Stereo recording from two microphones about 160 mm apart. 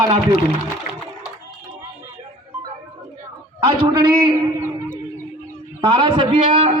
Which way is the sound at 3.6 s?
35° right (ahead or behind).